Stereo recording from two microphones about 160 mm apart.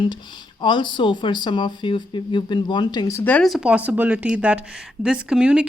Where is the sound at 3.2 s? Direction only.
10° left (ahead or behind).